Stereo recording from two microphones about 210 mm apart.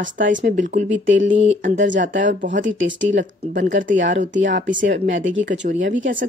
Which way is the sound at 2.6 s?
60° right (ahead or behind).